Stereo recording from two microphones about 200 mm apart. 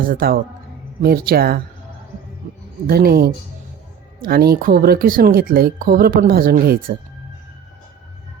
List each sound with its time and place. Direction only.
0.0 s speech: 45° right (ahead or behind)
2.4 s music: 40° right (ahead or behind)
2.8 s speech: 50° right (ahead or behind)